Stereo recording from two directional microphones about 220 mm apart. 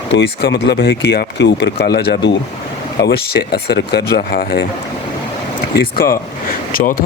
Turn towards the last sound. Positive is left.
turn(degrees=40)  # may be behind; listen again after turning